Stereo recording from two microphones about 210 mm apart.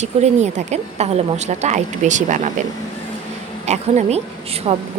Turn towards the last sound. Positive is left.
turn(degrees=-30)  # may be behind; listen again after turning